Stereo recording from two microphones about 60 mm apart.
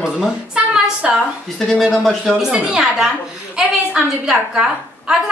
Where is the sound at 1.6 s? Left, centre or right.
Centre.